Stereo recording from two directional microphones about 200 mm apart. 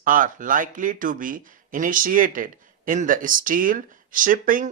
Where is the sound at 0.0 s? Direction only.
45° right (ahead or behind).